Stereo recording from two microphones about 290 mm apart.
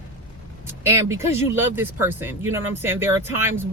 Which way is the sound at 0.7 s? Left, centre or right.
Centre.